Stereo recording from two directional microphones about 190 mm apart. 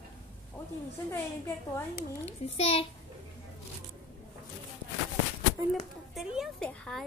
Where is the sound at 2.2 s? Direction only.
35° left (ahead or behind).